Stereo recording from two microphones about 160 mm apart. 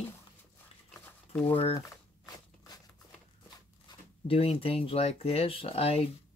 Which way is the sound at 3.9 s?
35° left (ahead or behind).